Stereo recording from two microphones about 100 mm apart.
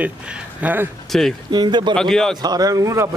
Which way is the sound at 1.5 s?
45° right (ahead or behind).